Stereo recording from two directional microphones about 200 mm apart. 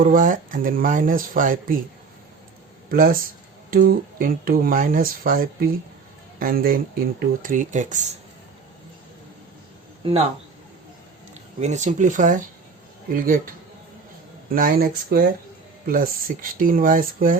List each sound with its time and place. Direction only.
0.0 s speech: 45° right (ahead or behind)
2.9 s speech: 45° right (ahead or behind)
10.0 s speech: 30° right (ahead or behind)
11.6 s speech: 35° right (ahead or behind)
14.5 s speech: 45° right (ahead or behind)